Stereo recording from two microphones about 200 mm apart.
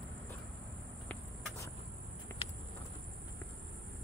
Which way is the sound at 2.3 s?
10° left (ahead or behind).